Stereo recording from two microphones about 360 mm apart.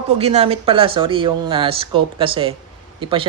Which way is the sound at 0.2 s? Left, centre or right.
Centre.